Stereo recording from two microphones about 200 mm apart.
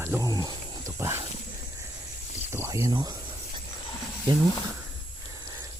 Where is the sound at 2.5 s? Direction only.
15° right (ahead or behind).